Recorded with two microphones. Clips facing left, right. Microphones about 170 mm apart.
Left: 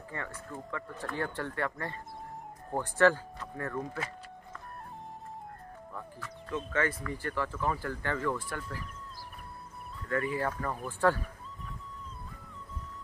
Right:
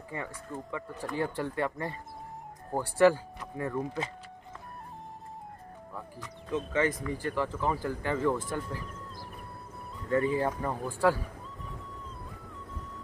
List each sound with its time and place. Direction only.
0.1 s speech: 10° right (ahead or behind)
5.9 s speech: 15° right (ahead or behind)
10.0 s speech: 20° right (ahead or behind)